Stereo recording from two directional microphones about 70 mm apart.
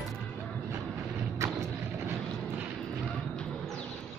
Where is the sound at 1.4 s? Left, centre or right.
Right.